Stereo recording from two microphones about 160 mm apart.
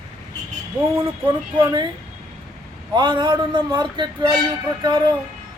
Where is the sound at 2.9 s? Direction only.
30° right (ahead or behind).